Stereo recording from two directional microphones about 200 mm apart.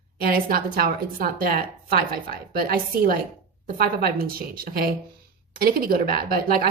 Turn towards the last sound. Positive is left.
turn(degrees=-50)  # may be behind; listen again after turning